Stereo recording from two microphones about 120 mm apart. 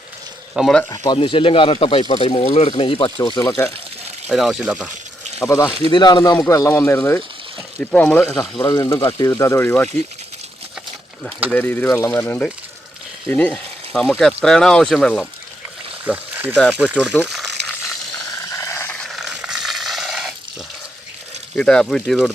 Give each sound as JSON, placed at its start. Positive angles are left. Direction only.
{"t": 0.5, "sound": "speech", "side_deg": 0}
{"t": 0.9, "sound": "speech", "side_deg": 40}
{"t": 4.3, "sound": "speech", "side_deg": 0}
{"t": 5.5, "sound": "speech", "side_deg": 25}
{"t": 5.9, "sound": "speech", "side_deg": 40}
{"t": 6.4, "sound": "speech", "side_deg": 25}
{"t": 7.8, "sound": "speech", "side_deg": 10}
{"t": 8.7, "sound": "speech", "side_deg": 25}
{"t": 11.5, "sound": "speech", "side_deg": 15}
{"t": 16.0, "sound": "a sound", "side_deg": -15}
{"t": 16.6, "sound": "speech", "side_deg": -10}
{"t": 18.3, "sound": "a sound", "side_deg": 25}
{"t": 18.9, "sound": "dog", "side_deg": 0}
{"t": 21.5, "sound": "speech", "side_deg": 5}